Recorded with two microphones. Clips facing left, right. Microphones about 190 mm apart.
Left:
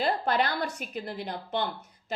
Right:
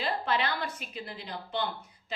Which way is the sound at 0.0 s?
45° left (ahead or behind).